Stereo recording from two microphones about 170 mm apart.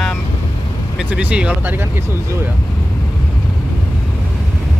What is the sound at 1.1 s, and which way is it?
Speech, 5° right (ahead or behind).